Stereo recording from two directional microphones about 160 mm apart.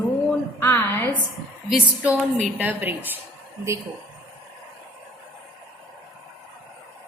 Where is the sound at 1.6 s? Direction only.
5° right (ahead or behind).